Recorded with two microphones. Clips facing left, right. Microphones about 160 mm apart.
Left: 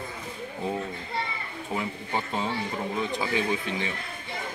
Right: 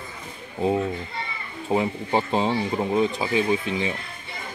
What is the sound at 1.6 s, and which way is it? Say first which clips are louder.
Speech: right 9 dB; 30° right (ahead or behind).